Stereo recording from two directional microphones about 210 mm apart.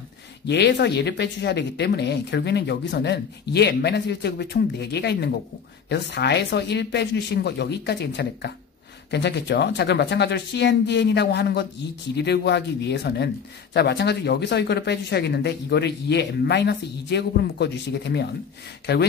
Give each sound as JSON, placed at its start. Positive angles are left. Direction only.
{"t": 0.5, "sound": "speech", "side_deg": 55}